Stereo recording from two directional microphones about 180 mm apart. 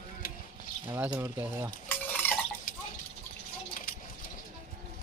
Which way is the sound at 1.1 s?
15° right (ahead or behind).